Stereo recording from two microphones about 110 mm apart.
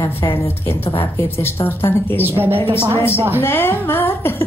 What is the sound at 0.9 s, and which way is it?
Speech, 20° left (ahead or behind).